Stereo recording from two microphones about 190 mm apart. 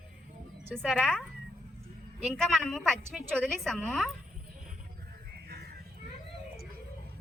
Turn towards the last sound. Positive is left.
turn(degrees=-55)  # may be behind; listen again after turning